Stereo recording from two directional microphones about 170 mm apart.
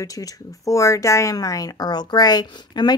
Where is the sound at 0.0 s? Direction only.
20° left (ahead or behind).